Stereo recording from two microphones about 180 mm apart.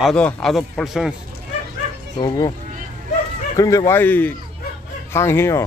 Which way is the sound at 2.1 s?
20° left (ahead or behind).